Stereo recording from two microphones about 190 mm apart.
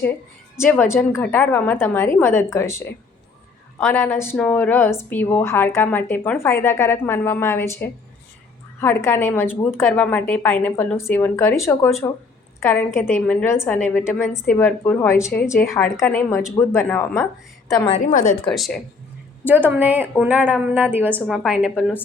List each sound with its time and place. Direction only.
0.6 s a woman's voice: 10° left (ahead or behind)
17.8 s a woman's voice: 35° left (ahead or behind)
18.4 s a woman's voice: centre (ahead or behind)
19.5 s a woman's voice: 10° right (ahead or behind)